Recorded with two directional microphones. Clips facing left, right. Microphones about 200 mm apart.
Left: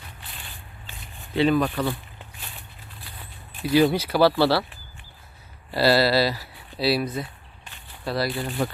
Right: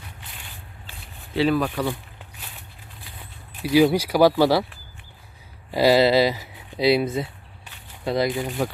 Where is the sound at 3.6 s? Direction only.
10° right (ahead or behind).